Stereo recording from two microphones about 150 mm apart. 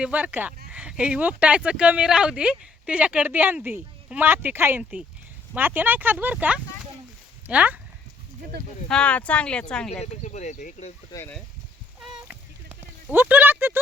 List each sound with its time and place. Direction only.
0.0 s speech: 10° right (ahead or behind)
8.9 s speech: 5° left (ahead or behind)
9.9 s speech: 50° left (ahead or behind)
11.1 s speech: 15° left (ahead or behind)
12.3 s a sound: 10° right (ahead or behind)